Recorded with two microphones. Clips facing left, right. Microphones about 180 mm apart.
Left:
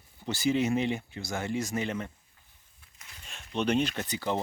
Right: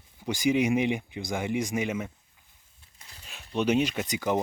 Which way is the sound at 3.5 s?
10° right (ahead or behind).